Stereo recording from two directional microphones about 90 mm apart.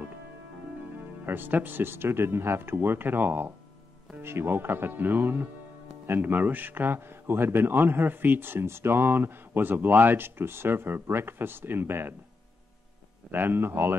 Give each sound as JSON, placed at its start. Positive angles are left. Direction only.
{"t": 1.2, "sound": "a man's voice", "side_deg": -25}
{"t": 13.3, "sound": "a man's voice", "side_deg": -20}